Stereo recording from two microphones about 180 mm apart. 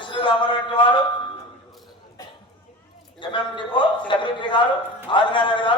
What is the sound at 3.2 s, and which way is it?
A man's voice, 25° left (ahead or behind).